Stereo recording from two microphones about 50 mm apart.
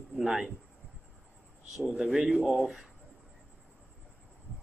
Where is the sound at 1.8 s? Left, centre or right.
Centre.